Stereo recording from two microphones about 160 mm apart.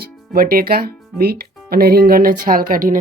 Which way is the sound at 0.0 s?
65° right (ahead or behind).